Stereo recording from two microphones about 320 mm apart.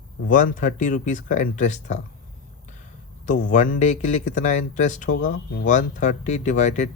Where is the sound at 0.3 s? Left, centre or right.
Left.